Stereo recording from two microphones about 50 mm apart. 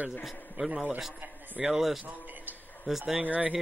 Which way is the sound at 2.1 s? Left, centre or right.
Right.